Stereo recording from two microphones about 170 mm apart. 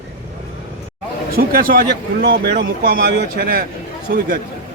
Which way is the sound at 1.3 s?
60° right (ahead or behind).